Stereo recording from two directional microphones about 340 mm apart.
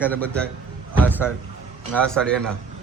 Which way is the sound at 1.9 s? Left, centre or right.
Centre.